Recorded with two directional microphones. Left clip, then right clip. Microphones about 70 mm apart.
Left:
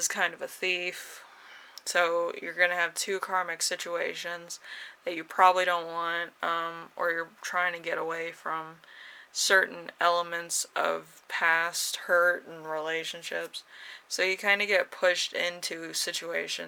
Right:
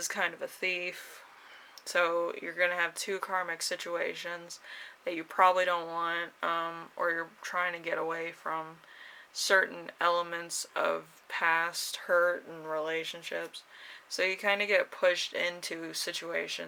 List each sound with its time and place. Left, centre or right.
0.0 s speech: left